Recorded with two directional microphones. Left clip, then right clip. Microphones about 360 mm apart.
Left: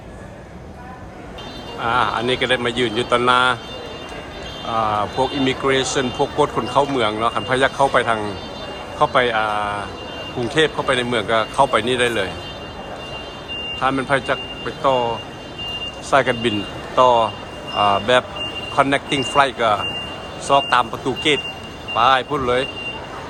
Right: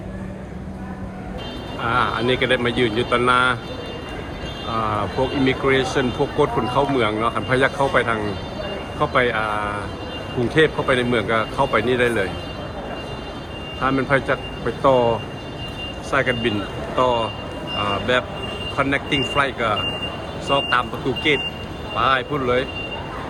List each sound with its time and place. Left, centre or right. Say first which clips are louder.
1.8 s speech: left 2 dB; centre
4.7 s speech: left 3 dB; centre
13.8 s speech: even; centre
21.9 s speech: left 4 dB; centre